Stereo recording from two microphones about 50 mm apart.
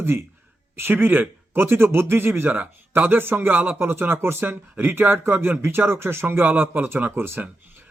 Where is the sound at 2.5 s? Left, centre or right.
Right.